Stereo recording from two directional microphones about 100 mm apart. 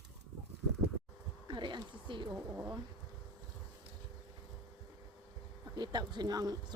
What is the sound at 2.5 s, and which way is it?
Bee, 20° right (ahead or behind).